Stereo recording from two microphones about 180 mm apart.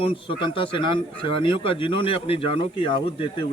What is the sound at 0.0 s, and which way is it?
Speech, 30° left (ahead or behind).